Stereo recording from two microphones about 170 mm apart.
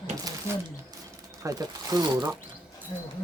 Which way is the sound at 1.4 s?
20° right (ahead or behind).